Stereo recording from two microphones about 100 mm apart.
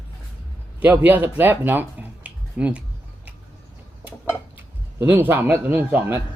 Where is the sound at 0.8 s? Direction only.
15° right (ahead or behind).